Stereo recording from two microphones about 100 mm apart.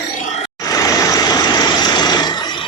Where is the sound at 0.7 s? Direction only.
40° left (ahead or behind).